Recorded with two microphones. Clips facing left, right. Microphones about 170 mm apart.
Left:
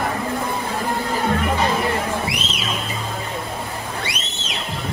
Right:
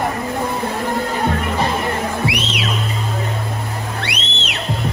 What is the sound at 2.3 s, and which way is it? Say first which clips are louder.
Music: right 5 dB; 70° right (ahead or behind).